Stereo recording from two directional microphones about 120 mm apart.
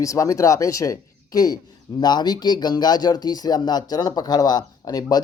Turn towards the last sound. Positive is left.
turn(degrees=30)  # may be behind; listen again after turning